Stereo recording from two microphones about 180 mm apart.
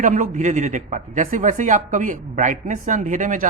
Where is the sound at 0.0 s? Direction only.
45° right (ahead or behind).